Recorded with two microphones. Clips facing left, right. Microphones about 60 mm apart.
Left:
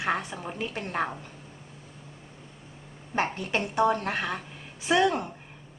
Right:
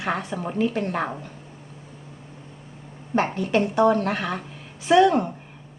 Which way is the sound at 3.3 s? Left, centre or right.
Centre.